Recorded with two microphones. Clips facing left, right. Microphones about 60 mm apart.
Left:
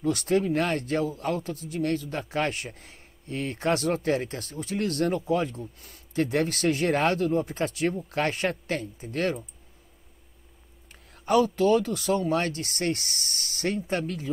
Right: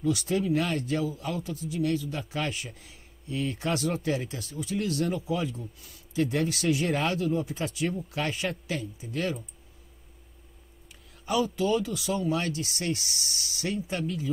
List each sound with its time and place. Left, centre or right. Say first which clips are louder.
0.0 s speech: left 3 dB; left
11.2 s speech: left 5 dB; left